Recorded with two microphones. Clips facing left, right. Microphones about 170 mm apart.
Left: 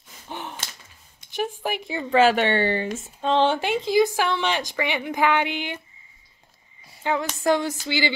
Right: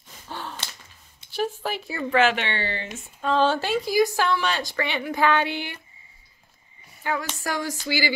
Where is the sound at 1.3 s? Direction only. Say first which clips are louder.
Even; 15° left (ahead or behind).